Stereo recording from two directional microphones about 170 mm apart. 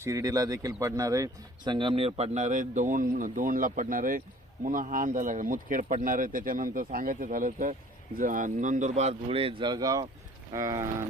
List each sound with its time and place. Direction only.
0.0 s speech: 20° right (ahead or behind)